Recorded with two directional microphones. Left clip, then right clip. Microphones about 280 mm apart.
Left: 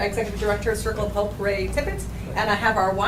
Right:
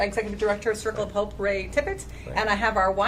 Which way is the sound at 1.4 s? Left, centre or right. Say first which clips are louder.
Left 1 dB; right.